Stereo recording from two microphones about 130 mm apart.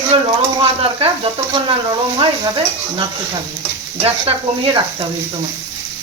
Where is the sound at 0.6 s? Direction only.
45° right (ahead or behind).